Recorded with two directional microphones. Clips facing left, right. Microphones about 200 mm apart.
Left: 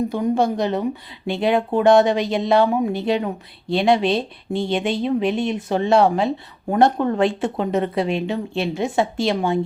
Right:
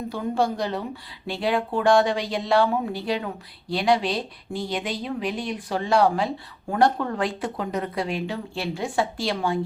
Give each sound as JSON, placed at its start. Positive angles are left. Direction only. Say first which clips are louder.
{"t": 0.1, "sound": "speech", "louder": "left 5 dB", "side_deg": 20}